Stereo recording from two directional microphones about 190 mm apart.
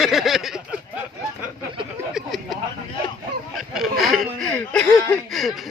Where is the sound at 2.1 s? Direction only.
Centre (ahead or behind).